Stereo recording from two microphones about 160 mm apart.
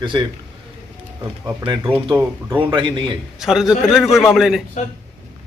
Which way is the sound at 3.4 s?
Centre (ahead or behind).